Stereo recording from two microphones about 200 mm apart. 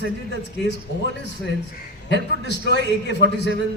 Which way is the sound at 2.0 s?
60° left (ahead or behind).